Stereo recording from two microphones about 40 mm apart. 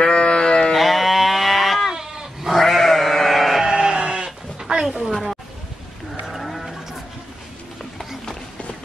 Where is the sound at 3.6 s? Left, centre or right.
Centre.